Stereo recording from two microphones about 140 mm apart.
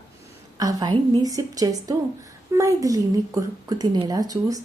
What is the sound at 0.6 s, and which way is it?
Speech, 25° right (ahead or behind).